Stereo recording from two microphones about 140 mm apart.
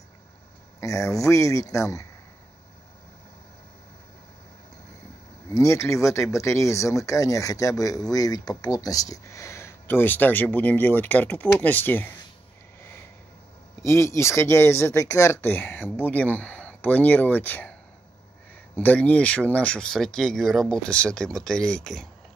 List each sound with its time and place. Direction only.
0.7 s speech: 20° left (ahead or behind)
5.5 s speech: 20° left (ahead or behind)
13.8 s speech: 20° left (ahead or behind)
18.8 s speech: 10° left (ahead or behind)